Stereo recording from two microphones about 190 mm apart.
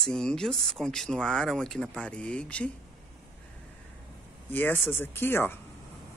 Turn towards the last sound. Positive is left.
turn(degrees=10)  # may be behind; listen again after turning